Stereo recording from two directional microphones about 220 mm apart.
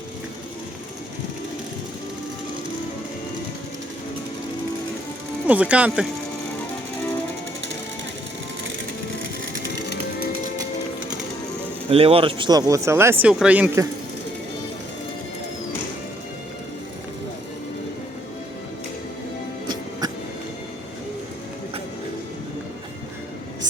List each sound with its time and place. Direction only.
5.5 s speech: 5° right (ahead or behind)
11.9 s speech: 25° right (ahead or behind); by 13.8 s 5° right (ahead or behind)